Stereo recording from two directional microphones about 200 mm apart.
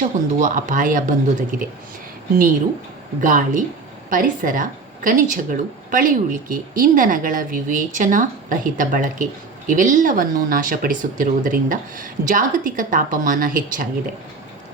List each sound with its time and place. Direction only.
0.0 s speech: 40° right (ahead or behind)
3.2 s speech: 40° right (ahead or behind)